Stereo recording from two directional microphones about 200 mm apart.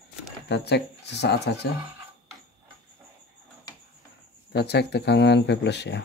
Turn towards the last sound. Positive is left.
turn(degrees=60)  # may be behind; listen again after turning